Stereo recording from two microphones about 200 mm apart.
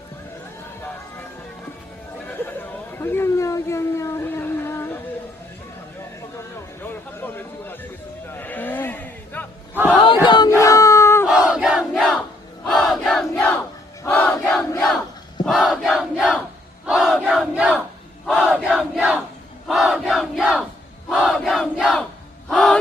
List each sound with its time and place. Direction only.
2.2 s chatter: 10° left (ahead or behind)
6.8 s a sound: 10° left (ahead or behind)
8.3 s music: 10° left (ahead or behind)
10.2 s battle cry: 20° left (ahead or behind)
10.6 s a sound: 15° left (ahead or behind)
11.3 s crowd: 5° right (ahead or behind)
12.6 s battle cry: centre (ahead or behind)
14.8 s crowd: centre (ahead or behind)
15.4 s battle cry: centre (ahead or behind)
16.8 s crowd: centre (ahead or behind)
18.3 s battle cry: centre (ahead or behind)
19.6 s crowd: centre (ahead or behind)
22.4 s a sound: 5° left (ahead or behind)